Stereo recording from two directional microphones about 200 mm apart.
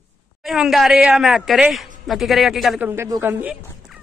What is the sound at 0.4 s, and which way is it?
A woman's voice, centre (ahead or behind).